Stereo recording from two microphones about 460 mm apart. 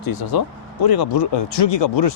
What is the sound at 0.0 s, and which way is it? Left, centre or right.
Speech, left.